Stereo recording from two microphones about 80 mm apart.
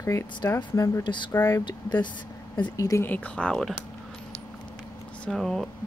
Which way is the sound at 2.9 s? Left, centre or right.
Left.